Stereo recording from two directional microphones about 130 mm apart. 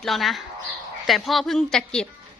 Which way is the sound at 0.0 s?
Centre (ahead or behind).